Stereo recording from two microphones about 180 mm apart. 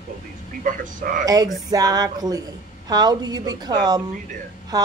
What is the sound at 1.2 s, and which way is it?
A woman's voice, 20° right (ahead or behind).